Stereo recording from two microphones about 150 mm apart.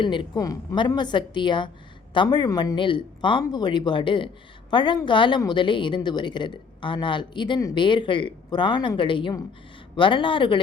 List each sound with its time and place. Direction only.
0.0 s a woman's voice: 35° left (ahead or behind)